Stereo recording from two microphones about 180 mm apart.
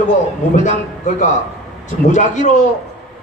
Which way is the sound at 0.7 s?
40° left (ahead or behind).